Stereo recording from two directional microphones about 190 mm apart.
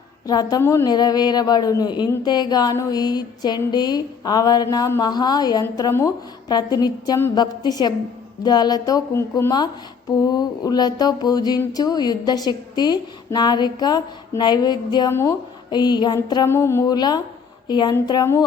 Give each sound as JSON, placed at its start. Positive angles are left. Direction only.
{"t": 0.3, "sound": "a woman's voice", "side_deg": 20}